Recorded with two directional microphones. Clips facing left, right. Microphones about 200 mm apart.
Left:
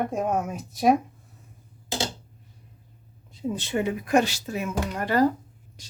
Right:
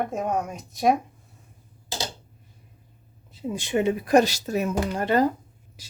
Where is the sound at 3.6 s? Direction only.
20° right (ahead or behind); by 5.0 s 40° right (ahead or behind).